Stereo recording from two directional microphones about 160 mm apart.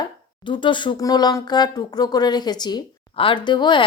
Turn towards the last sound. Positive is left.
turn(degrees=30)  # may be behind; listen again after turning